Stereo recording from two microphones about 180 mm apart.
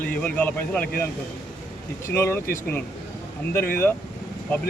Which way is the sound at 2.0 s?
15° left (ahead or behind).